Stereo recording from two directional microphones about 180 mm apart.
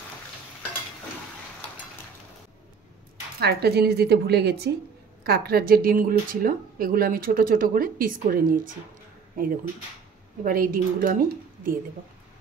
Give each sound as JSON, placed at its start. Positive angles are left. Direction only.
{"t": 3.3, "sound": "speech", "side_deg": -60}